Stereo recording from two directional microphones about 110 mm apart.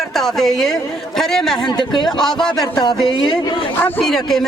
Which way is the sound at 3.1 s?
45° left (ahead or behind).